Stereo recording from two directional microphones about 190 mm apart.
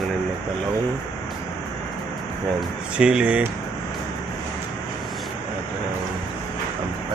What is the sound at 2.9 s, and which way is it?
Speech, 5° right (ahead or behind).